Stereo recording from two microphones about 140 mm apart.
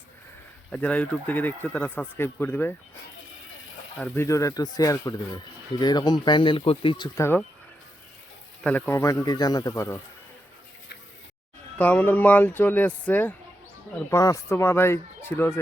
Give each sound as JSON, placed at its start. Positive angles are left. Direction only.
{"t": 0.7, "sound": "speech", "side_deg": 10}
{"t": 4.1, "sound": "speech", "side_deg": 20}
{"t": 7.2, "sound": "speech", "side_deg": 15}
{"t": 8.6, "sound": "speech", "side_deg": 15}
{"t": 11.8, "sound": "speech", "side_deg": 10}
{"t": 14.1, "sound": "speech", "side_deg": 20}